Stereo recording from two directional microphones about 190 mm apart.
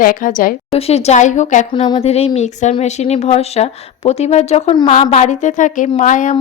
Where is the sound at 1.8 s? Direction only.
30° left (ahead or behind).